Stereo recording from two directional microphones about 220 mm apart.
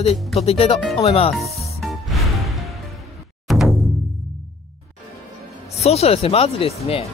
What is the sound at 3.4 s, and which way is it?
Music, centre (ahead or behind).